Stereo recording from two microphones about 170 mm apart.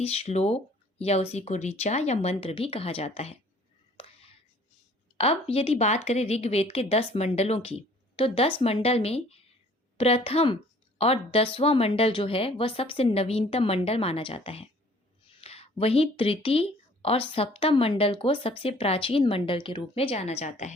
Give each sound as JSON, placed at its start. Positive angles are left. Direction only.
{"t": 0.0, "sound": "a woman's voice", "side_deg": 35}
{"t": 3.9, "sound": "a sound", "side_deg": 35}
{"t": 5.1, "sound": "a woman's voice", "side_deg": 35}